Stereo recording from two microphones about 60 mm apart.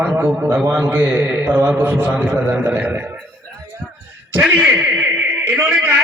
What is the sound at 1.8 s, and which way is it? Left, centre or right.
A man's voice, right.